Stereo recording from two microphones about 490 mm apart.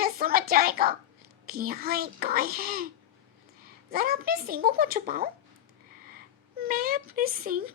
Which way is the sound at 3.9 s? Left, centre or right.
Centre.